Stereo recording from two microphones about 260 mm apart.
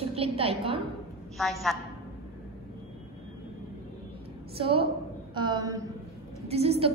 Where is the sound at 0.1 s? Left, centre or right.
Right.